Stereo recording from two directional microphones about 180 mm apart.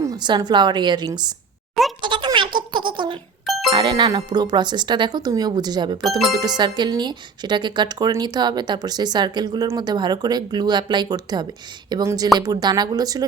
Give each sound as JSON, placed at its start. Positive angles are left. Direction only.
{"t": 0.0, "sound": "speech", "side_deg": -20}
{"t": 2.0, "sound": "a sound", "side_deg": -25}
{"t": 3.4, "sound": "music", "side_deg": 0}
{"t": 3.7, "sound": "speech", "side_deg": -25}
{"t": 6.0, "sound": "speech", "side_deg": 0}
{"t": 6.3, "sound": "speech", "side_deg": -20}